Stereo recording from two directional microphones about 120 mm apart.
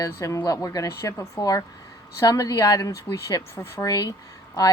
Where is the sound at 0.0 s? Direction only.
25° left (ahead or behind).